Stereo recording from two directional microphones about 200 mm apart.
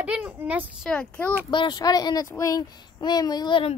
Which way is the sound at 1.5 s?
20° left (ahead or behind).